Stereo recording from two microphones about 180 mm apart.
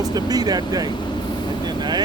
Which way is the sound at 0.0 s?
20° right (ahead or behind).